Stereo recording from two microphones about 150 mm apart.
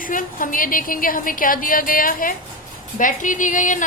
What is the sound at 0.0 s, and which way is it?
A woman's voice, 65° left (ahead or behind).